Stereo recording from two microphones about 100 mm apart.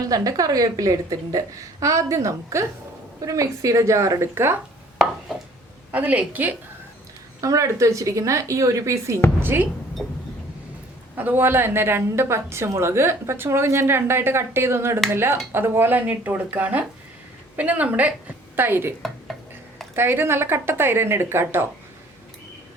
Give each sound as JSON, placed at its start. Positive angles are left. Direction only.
{"t": 0.0, "sound": "a woman's voice", "side_deg": -35}
{"t": 5.9, "sound": "a woman's voice", "side_deg": -15}
{"t": 7.4, "sound": "a woman's voice", "side_deg": -30}
{"t": 10.0, "sound": "vehicle", "side_deg": 5}
{"t": 11.2, "sound": "a woman's voice", "side_deg": -20}
{"t": 20.0, "sound": "a woman's voice", "side_deg": -25}